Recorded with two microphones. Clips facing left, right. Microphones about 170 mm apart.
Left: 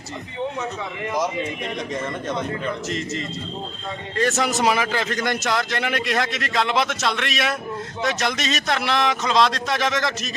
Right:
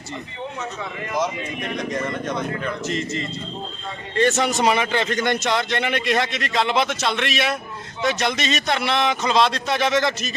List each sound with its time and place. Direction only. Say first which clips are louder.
2.0 s a man's voice: right 1 dB; centre (ahead or behind)